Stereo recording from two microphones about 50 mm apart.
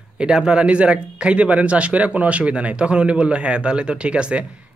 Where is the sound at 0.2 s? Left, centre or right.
Centre.